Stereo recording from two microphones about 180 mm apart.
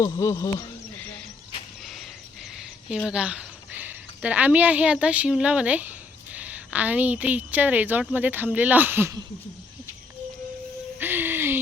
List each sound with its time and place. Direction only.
0.0 s speech: 15° left (ahead or behind)
2.6 s a woman's voice: 5° right (ahead or behind)
11.0 s a sound: 10° right (ahead or behind)